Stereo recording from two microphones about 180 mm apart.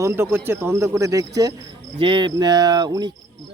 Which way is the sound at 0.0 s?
15° right (ahead or behind).